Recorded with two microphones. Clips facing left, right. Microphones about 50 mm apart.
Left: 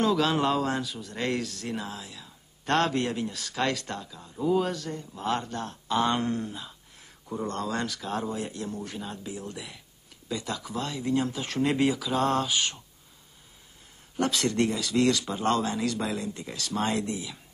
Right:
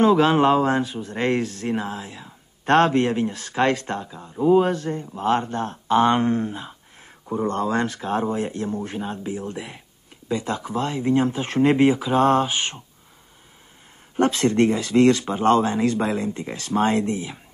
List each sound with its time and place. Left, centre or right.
0.0 s speech: right
14.1 s speech: right